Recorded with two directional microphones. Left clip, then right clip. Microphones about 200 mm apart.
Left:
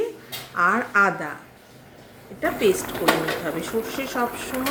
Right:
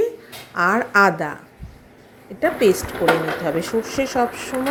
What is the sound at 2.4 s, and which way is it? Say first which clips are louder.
Speech: right 4 dB; 20° right (ahead or behind).